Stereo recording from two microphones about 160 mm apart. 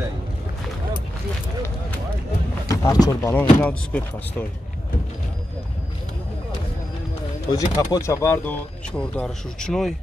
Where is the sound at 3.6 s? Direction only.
10° left (ahead or behind).